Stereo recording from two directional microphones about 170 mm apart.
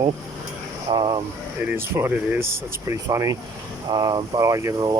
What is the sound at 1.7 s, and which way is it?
Speech, 15° right (ahead or behind).